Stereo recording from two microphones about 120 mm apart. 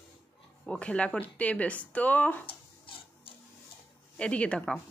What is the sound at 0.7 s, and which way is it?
Speech, 10° left (ahead or behind).